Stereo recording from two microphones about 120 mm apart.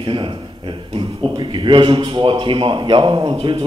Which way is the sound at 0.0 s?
40° right (ahead or behind).